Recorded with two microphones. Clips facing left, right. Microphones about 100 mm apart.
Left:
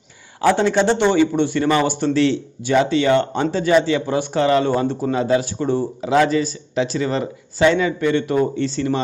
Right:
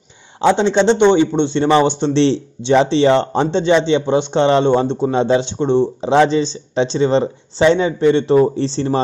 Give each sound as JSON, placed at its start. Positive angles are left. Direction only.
{"t": 0.4, "sound": "a man's voice", "side_deg": -20}